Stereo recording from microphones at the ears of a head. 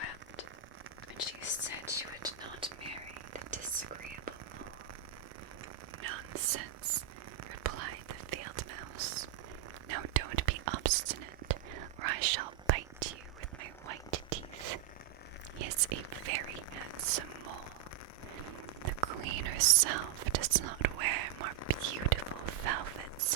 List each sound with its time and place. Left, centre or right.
1.2 s whispering: left
6.0 s whispering: right
18.9 s whispering: right